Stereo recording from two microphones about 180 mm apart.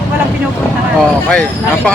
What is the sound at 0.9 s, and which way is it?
Speech, 5° left (ahead or behind).